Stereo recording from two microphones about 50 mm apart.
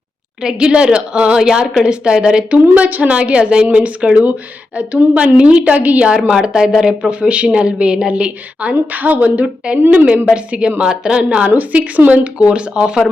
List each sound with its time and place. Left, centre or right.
0.4 s a woman's voice: centre
2.5 s a woman's voice: right
6.1 s a woman's voice: centre
7.1 s a woman's voice: right
10.2 s a woman's voice: centre
11.4 s a woman's voice: right